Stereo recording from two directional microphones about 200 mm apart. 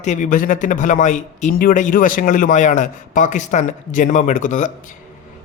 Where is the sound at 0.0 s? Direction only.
35° left (ahead or behind).